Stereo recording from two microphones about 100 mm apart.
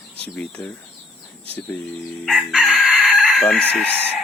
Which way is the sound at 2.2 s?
Centre (ahead or behind).